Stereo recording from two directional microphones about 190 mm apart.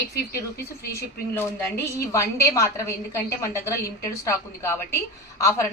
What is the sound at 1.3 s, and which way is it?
A woman's voice, 10° left (ahead or behind).